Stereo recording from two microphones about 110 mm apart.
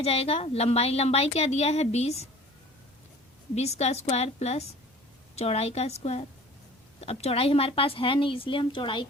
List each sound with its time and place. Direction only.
0.0 s a woman's voice: 65° left (ahead or behind)
3.5 s a woman's voice: 80° left; by 9.0 s 50° left (ahead or behind)